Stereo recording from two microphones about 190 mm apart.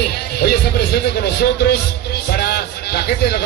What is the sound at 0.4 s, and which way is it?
A man's voice, 60° left (ahead or behind).